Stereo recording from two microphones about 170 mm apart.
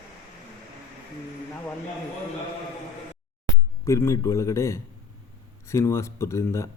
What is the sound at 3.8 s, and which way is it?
Speech, 15° left (ahead or behind).